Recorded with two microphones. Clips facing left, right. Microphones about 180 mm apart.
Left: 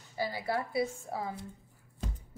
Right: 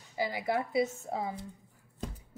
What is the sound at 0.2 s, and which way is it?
A woman's voice, 15° right (ahead or behind).